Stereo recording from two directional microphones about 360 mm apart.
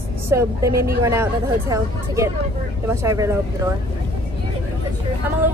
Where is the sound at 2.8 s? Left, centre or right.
Centre.